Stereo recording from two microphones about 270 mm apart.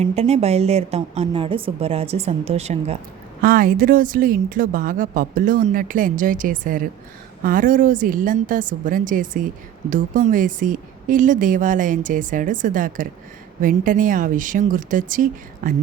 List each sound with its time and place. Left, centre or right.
0.0 s speech: right